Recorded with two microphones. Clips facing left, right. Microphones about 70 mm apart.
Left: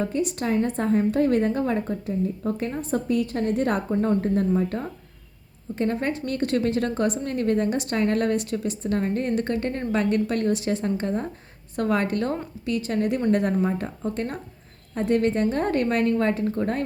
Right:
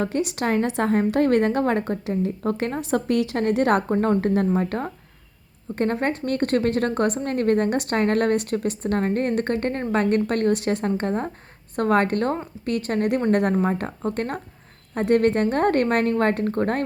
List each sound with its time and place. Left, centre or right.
0.0 s a woman's voice: right
3.9 s a woman's voice: right
4.2 s a woman's voice: right